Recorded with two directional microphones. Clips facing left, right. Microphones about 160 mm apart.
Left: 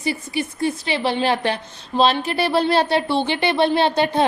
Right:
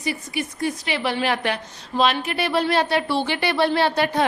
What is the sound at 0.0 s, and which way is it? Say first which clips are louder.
Speech: left 3 dB; 30° left (ahead or behind).